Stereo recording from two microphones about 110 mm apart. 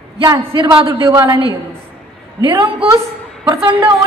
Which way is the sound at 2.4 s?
40° right (ahead or behind).